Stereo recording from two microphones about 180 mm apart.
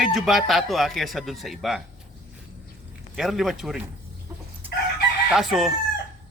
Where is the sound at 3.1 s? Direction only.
Centre (ahead or behind).